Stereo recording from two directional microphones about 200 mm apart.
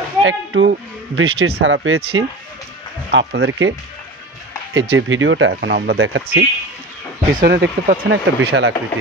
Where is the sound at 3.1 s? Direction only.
60° right (ahead or behind); by 3.7 s 75° right (ahead or behind).